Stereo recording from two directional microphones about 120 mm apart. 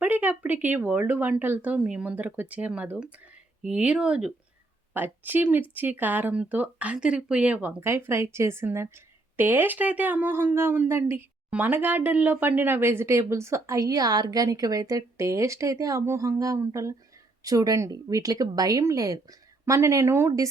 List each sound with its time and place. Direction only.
0.0 s speech: 15° right (ahead or behind)